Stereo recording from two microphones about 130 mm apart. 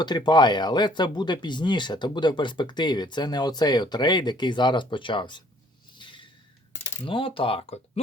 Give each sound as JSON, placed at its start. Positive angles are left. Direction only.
{"t": 0.0, "sound": "speech", "side_deg": 35}
{"t": 6.0, "sound": "a sound", "side_deg": 40}
{"t": 7.0, "sound": "speech", "side_deg": 40}